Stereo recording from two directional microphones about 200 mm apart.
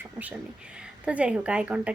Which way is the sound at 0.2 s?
5° right (ahead or behind).